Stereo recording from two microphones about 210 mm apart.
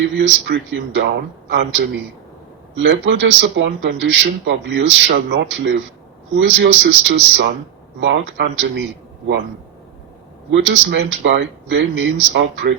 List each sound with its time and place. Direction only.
0.2 s speech: 60° right (ahead or behind)
10.5 s speech: 60° right (ahead or behind)